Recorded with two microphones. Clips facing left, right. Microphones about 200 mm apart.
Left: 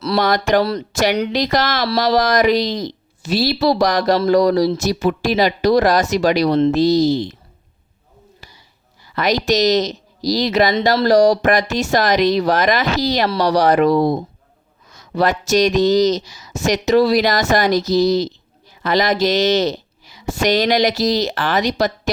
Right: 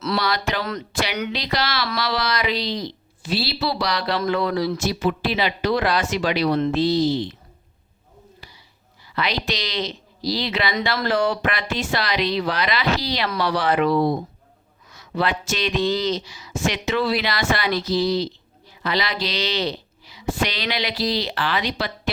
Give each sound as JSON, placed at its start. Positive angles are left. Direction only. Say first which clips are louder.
{"t": 0.2, "sound": "speech", "louder": "left 9 dB", "side_deg": 50}
{"t": 8.4, "sound": "a sound", "louder": "left 1 dB", "side_deg": 45}
{"t": 9.0, "sound": "a woman's voice", "louder": "left 8 dB", "side_deg": 45}